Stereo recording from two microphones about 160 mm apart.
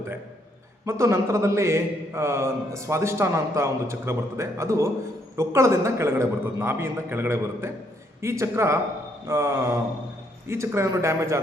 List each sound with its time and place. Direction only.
0.9 s a man's voice: 15° right (ahead or behind)